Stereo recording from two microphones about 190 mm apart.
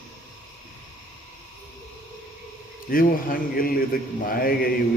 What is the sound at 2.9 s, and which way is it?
Speech, 50° left (ahead or behind).